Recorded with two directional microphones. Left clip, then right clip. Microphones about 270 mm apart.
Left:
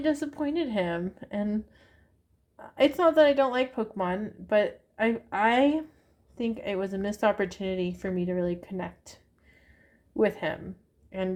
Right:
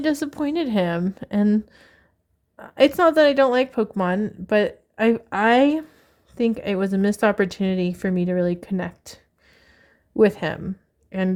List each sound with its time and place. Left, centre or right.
0.0 s a woman's voice: right